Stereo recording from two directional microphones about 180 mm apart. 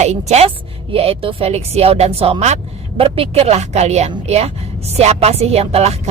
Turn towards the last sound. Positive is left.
turn(degrees=-35)  # may be behind; listen again after turning